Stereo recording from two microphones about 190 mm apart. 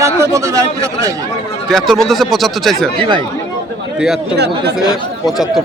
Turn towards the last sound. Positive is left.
turn(degrees=0)  # may be behind; listen again after turning